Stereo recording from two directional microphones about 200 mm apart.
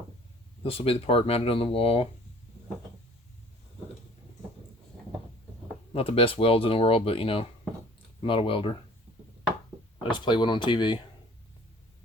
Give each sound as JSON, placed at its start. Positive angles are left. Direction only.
{"t": 0.6, "sound": "speech", "side_deg": 30}
{"t": 5.9, "sound": "speech", "side_deg": 30}
{"t": 10.0, "sound": "speech", "side_deg": 25}